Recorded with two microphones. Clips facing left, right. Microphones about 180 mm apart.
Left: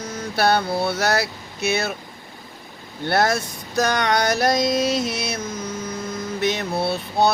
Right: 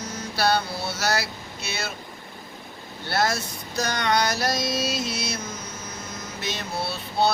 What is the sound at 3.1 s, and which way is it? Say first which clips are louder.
Female singing: left 5 dB; 55° left (ahead or behind).